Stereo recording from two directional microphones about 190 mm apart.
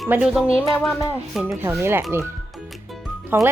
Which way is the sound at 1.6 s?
10° right (ahead or behind).